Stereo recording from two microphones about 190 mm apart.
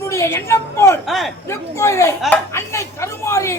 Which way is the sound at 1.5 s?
15° left (ahead or behind).